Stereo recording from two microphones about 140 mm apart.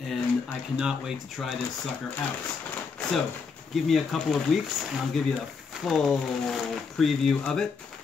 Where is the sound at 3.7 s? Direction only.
Centre (ahead or behind).